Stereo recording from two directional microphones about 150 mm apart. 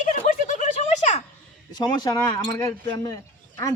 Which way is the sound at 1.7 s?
30° left (ahead or behind).